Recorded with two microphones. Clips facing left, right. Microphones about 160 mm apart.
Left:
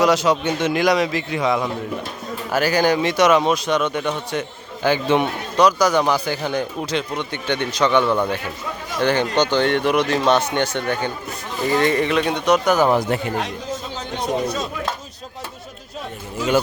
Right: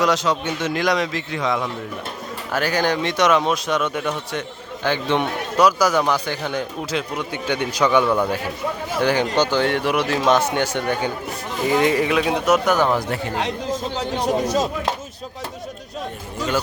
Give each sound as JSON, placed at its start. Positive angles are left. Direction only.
{"t": 0.0, "sound": "speech", "side_deg": 10}
{"t": 5.5, "sound": "a man's voice", "side_deg": -5}
{"t": 13.1, "sound": "a man's voice", "side_deg": 20}